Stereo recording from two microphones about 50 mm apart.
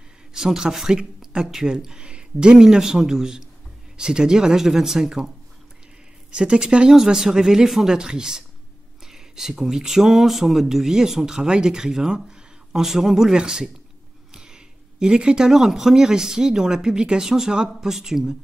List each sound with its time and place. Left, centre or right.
0.3 s speech: centre
6.3 s speech: centre